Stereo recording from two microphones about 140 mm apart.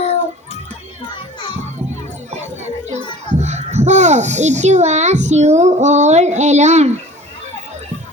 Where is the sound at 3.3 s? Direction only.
55° right (ahead or behind).